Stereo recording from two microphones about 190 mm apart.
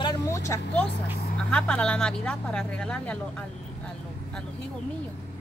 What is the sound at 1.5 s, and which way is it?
Speech, 5° left (ahead or behind).